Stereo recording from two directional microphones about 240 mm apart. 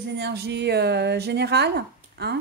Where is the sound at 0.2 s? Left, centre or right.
Right.